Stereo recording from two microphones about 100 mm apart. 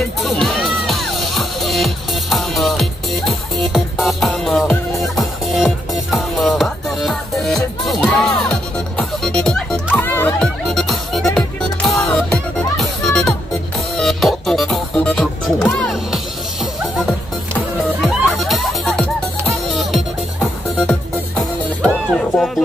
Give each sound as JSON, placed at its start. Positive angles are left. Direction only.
{"t": 0.2, "sound": "music", "side_deg": 0}
{"t": 9.9, "sound": "music", "side_deg": 20}
{"t": 10.4, "sound": "music", "side_deg": 5}
{"t": 18.0, "sound": "music", "side_deg": 0}
{"t": 21.4, "sound": "music", "side_deg": 0}